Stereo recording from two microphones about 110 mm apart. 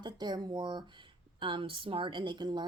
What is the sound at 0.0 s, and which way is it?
A woman's voice, 40° right (ahead or behind).